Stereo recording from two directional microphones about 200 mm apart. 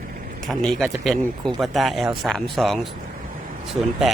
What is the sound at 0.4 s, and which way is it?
Speech, centre (ahead or behind).